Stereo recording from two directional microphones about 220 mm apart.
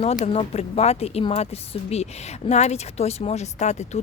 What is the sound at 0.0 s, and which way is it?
Speech, 30° left (ahead or behind).